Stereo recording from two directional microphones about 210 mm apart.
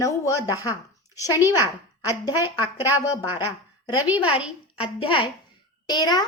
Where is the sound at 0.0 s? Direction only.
15° left (ahead or behind).